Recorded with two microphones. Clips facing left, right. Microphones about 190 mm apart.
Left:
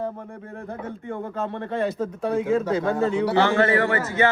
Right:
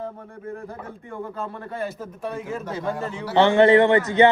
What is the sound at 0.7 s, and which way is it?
Speech, 60° left (ahead or behind).